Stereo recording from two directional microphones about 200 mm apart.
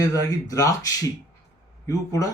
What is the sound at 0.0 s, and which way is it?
Speech, 15° left (ahead or behind).